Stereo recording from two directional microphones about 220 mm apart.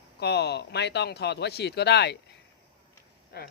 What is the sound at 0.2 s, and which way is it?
Speech, 50° left (ahead or behind).